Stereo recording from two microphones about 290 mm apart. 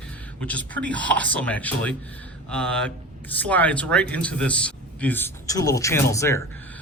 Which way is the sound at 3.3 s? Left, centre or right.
Centre.